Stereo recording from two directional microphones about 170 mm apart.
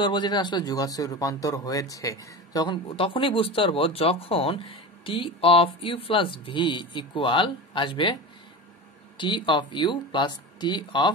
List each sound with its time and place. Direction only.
0.0 s speech: 25° left (ahead or behind)
9.2 s speech: 30° left (ahead or behind)